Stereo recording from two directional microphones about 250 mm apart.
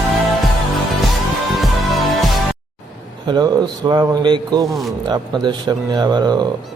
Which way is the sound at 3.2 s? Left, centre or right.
Centre.